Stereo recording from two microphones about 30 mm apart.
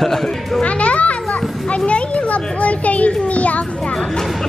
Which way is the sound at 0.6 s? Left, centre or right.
Left.